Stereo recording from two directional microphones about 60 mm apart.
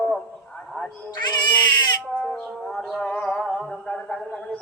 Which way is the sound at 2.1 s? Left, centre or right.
Centre.